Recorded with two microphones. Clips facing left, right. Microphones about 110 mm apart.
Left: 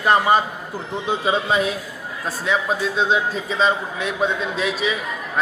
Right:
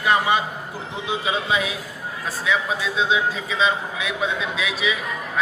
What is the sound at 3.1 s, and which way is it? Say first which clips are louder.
A man's voice: left 1 dB; 45° left (ahead or behind).